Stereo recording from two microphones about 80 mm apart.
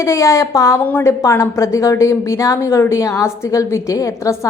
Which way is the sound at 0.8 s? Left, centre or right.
Left.